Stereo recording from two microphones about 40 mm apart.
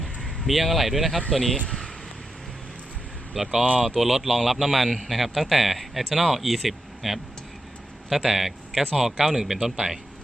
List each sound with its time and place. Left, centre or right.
0.2 s speech: centre
1.3 s speech: centre
3.3 s speech: centre
3.6 s speech: right
3.8 s speech: centre
4.9 s a man's voice: centre
5.1 s speech: centre